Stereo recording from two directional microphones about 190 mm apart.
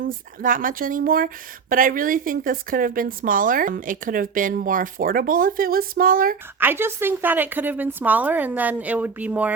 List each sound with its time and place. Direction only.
0.0 s a woman's voice: 45° right (ahead or behind)
6.6 s a woman's voice: 10° right (ahead or behind)